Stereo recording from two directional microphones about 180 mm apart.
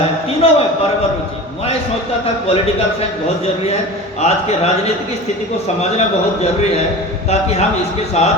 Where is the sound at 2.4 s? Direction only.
35° left (ahead or behind).